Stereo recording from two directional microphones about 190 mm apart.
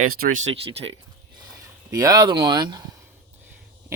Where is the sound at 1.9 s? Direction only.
20° right (ahead or behind).